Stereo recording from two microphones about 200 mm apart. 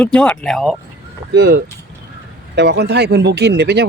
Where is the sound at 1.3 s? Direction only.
55° right (ahead or behind).